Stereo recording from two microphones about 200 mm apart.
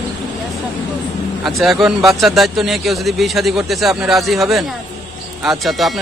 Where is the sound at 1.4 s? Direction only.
Centre (ahead or behind).